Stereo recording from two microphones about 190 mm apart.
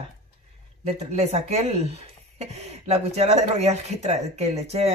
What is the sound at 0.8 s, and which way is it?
Speech, 35° right (ahead or behind).